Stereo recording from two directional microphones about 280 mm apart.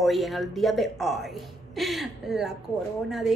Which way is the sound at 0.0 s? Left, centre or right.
Centre.